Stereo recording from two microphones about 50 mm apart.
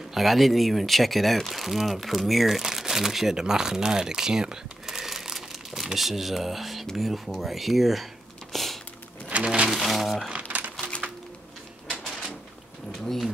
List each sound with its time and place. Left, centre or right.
0.1 s speech: centre
8.5 s a sound: centre
9.3 s a sound: right
9.7 s speech: centre
10.3 s crumpling: right
13.0 s speech: centre